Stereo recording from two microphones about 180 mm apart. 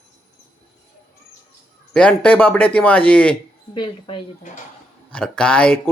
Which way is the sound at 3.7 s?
30° left (ahead or behind).